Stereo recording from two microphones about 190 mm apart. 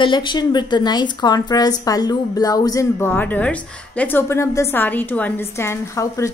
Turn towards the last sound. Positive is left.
turn(degrees=15)  # may be behind; listen again after turning